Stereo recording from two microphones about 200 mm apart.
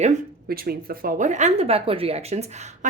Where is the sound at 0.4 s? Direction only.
50° right (ahead or behind).